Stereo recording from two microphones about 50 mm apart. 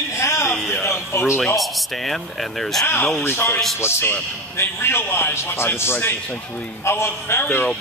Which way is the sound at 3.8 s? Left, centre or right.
Left.